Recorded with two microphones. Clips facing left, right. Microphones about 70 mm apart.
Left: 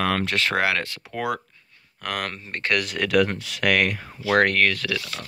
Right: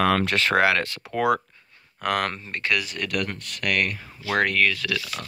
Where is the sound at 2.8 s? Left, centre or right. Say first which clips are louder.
Left 7 dB; left.